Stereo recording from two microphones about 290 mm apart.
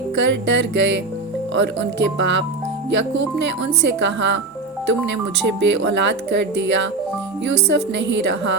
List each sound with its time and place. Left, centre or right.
0.2 s speech: right
5.5 s speech: right